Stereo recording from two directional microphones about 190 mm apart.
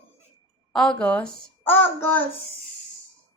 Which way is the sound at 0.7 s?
5° left (ahead or behind).